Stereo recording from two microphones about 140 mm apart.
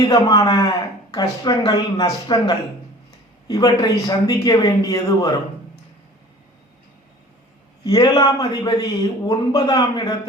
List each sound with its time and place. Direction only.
0.1 s a man's voice: 30° left (ahead or behind)
7.9 s a man's voice: 25° left (ahead or behind)